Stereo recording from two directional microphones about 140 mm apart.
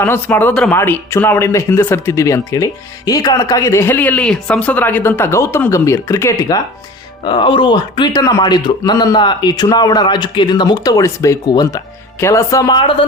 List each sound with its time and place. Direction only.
0.0 s speech: 15° left (ahead or behind)
7.3 s speech: 35° left (ahead or behind)